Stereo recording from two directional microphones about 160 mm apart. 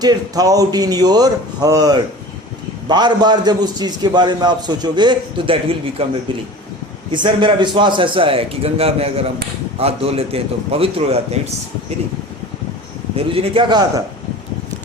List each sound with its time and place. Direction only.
0.0 s a man's voice: 25° right (ahead or behind)
13.1 s a man's voice: 35° right (ahead or behind)